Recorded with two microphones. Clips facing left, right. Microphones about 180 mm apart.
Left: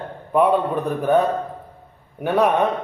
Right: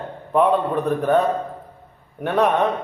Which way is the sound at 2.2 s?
5° left (ahead or behind).